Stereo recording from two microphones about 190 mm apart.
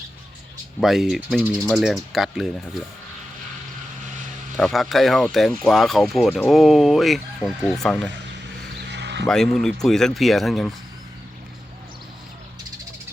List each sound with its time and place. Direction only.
0.8 s speech: centre (ahead or behind)
4.5 s speech: centre (ahead or behind)
8.9 s a sound: 65° right (ahead or behind)
9.2 s speech: 5° left (ahead or behind)